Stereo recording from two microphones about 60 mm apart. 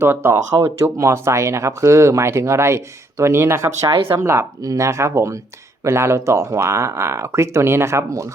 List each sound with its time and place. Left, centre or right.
0.0 s speech: right
0.8 s speech: right
4.6 s speech: right